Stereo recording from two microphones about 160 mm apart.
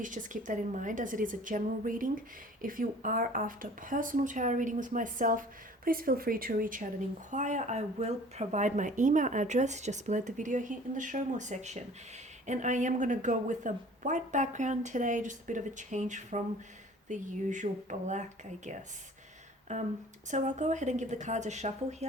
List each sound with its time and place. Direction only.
0.0 s speech: 55° right (ahead or behind)
7.3 s speech: 50° right (ahead or behind)